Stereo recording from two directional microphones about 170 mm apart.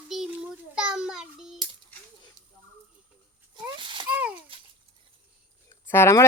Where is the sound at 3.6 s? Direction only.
30° right (ahead or behind).